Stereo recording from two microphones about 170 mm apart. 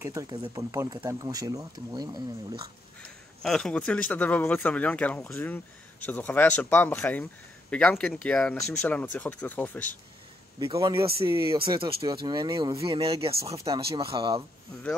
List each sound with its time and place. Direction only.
0.0 s speech: 20° right (ahead or behind)
3.0 s speech: 5° left (ahead or behind)
10.6 s speech: 20° right (ahead or behind)